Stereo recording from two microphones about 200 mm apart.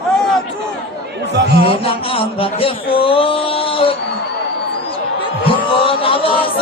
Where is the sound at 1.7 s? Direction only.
30° left (ahead or behind).